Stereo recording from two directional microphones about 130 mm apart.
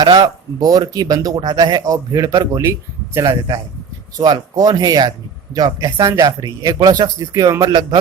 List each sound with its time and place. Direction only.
0.0 s speech: 30° right (ahead or behind)